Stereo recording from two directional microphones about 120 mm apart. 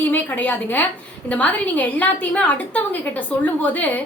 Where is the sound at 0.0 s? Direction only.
15° left (ahead or behind).